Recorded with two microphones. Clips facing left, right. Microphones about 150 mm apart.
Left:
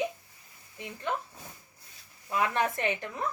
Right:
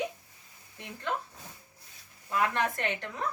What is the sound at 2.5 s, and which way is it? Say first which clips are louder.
Speech: left 2 dB; 15° left (ahead or behind).